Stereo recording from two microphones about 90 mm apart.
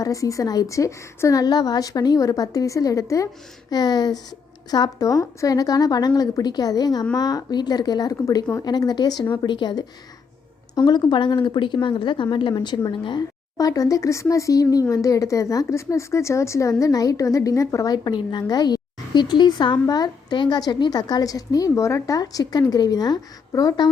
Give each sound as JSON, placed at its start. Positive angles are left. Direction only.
{"t": 0.0, "sound": "a woman's voice", "side_deg": 40}